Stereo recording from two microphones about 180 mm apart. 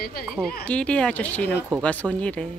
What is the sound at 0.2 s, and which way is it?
A woman's voice, centre (ahead or behind).